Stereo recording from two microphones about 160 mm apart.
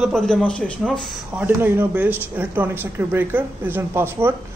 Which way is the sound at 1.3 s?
10° right (ahead or behind).